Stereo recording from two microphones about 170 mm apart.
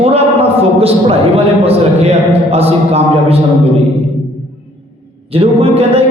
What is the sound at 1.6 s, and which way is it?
A man's voice, 35° right (ahead or behind).